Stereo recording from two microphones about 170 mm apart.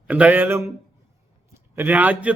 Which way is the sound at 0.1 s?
10° right (ahead or behind).